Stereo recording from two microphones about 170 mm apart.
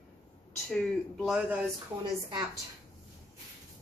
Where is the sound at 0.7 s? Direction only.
5° left (ahead or behind).